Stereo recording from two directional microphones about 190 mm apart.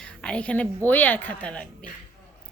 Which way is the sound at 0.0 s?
5° left (ahead or behind).